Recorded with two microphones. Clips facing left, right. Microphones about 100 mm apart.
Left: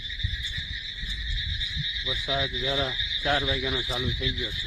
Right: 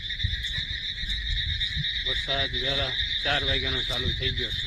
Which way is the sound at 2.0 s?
5° left (ahead or behind).